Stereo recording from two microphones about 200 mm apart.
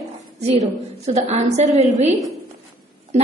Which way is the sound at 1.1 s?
35° right (ahead or behind).